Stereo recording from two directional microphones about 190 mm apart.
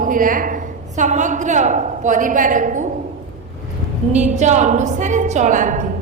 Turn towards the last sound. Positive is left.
turn(degrees=-40)  # may be behind; listen again after turning